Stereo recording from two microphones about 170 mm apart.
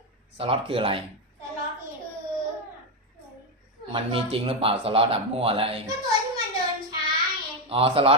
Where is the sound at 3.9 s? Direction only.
30° right (ahead or behind).